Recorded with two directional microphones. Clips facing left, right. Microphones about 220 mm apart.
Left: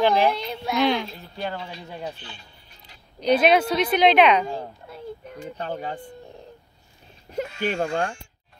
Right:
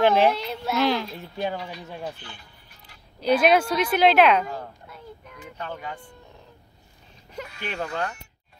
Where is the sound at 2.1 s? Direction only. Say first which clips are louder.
Left 1 dB; 20° left (ahead or behind).